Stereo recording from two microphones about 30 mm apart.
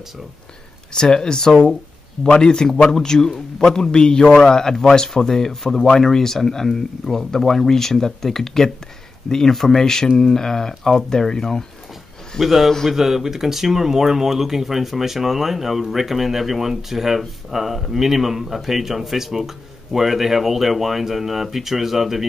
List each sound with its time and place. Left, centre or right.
0.9 s a man's voice: left; by 9.8 s centre
10.1 s speech: centre
12.4 s a man's voice: centre